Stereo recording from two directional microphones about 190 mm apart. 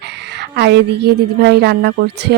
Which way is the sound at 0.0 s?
65° right (ahead or behind).